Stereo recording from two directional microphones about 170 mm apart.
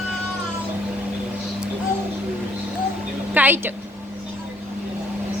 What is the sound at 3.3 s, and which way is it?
Speech, 10° right (ahead or behind).